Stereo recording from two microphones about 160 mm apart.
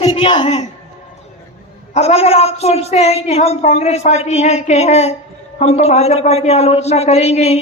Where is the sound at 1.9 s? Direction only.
40° left (ahead or behind).